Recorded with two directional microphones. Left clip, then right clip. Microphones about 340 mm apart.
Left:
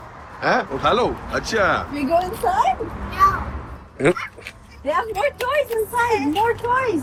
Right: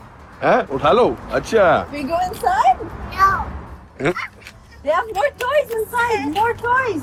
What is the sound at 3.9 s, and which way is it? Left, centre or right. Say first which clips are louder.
Speech: left 2 dB; centre.